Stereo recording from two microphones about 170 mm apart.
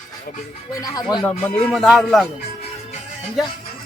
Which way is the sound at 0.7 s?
20° left (ahead or behind).